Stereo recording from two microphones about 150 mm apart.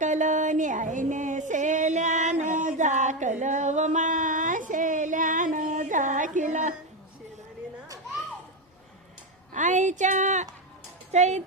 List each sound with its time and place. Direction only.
0.0 s music: 55° right (ahead or behind)
9.5 s a woman's voice: 55° right (ahead or behind)